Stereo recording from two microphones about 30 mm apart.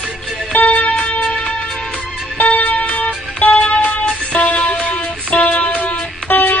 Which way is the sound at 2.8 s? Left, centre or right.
Left.